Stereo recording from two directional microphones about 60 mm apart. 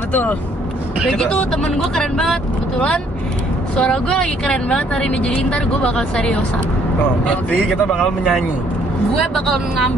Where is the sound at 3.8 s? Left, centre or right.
Centre.